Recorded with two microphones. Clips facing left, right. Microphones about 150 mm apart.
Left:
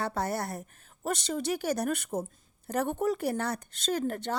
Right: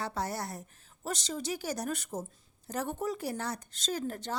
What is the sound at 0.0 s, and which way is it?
A woman's voice, 55° left (ahead or behind).